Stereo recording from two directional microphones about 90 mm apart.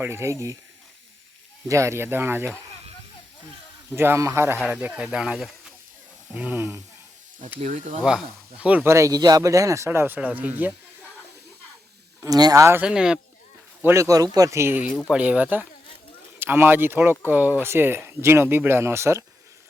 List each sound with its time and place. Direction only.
0.0 s speech: 30° right (ahead or behind)
1.6 s speech: 35° right (ahead or behind)
3.9 s speech: 25° right (ahead or behind)
4.8 s speech: 15° right (ahead or behind)
6.3 s speech: 15° right (ahead or behind)
8.0 s speech: 5° right (ahead or behind)
8.8 s speech: 30° right (ahead or behind)
10.2 s speech: 20° right (ahead or behind)
12.2 s speech: 45° right (ahead or behind)
12.8 s speech: 10° right (ahead or behind)
13.9 s speech: 40° right (ahead or behind)
15.1 s speech: 15° right (ahead or behind)